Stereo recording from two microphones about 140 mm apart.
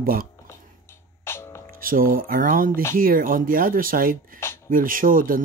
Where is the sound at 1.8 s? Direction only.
90° right.